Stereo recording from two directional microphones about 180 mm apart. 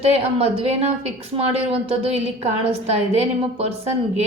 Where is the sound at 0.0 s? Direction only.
35° right (ahead or behind).